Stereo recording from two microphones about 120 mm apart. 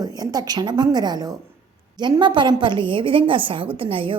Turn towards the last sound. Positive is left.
turn(degrees=-45)  # may be behind; listen again after turning